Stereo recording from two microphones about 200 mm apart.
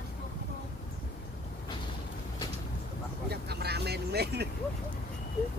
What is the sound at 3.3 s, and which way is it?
Vehicle, 55° right (ahead or behind).